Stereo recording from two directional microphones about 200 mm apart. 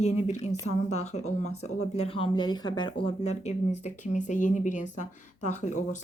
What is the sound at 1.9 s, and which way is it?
Speech, 25° left (ahead or behind).